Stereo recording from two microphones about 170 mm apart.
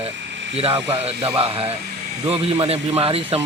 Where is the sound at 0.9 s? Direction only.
35° right (ahead or behind).